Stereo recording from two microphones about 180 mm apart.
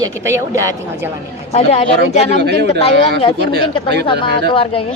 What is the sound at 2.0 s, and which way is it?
Speech, 65° right (ahead or behind).